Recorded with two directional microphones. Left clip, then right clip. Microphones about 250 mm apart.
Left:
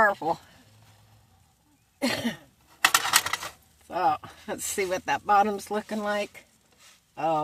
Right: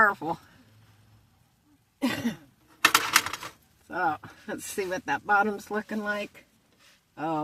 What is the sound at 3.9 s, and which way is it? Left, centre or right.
Speech, centre.